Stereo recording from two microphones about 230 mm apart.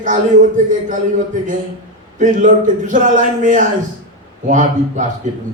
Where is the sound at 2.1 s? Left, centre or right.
Right.